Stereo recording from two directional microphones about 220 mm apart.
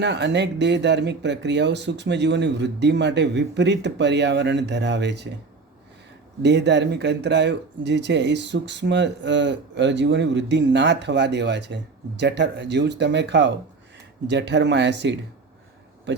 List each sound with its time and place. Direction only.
0.0 s speech: 50° right (ahead or behind)
6.4 s speech: 50° right (ahead or behind)